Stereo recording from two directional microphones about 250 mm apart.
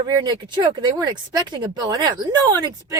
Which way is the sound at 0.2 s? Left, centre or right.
Centre.